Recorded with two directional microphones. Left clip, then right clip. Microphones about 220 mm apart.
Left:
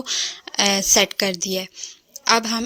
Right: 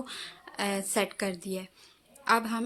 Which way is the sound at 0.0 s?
35° left (ahead or behind).